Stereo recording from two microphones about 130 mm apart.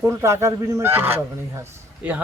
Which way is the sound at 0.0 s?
20° right (ahead or behind).